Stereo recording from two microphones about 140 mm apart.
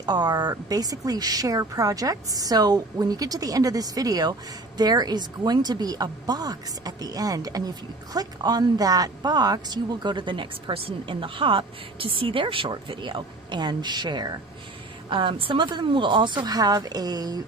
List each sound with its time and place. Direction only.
0.0 s a woman's voice: 30° right (ahead or behind)